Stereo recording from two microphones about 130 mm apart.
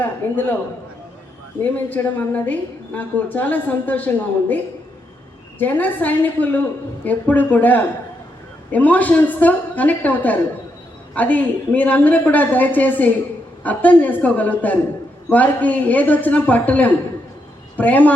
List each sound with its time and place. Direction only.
0.0 s a woman's voice: 15° left (ahead or behind)
1.6 s a woman's voice: 15° left (ahead or behind)